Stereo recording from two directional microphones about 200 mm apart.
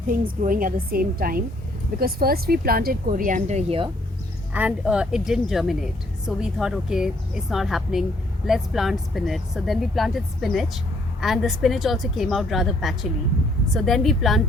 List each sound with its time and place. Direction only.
0.1 s speech: 45° right (ahead or behind)
4.5 s speech: 5° right (ahead or behind)